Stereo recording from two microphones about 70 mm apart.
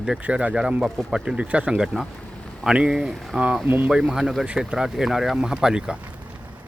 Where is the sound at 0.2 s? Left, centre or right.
Centre.